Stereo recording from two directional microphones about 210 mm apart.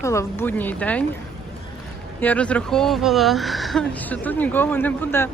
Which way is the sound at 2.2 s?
5° left (ahead or behind).